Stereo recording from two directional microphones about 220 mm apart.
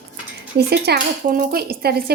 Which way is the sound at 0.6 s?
45° right (ahead or behind).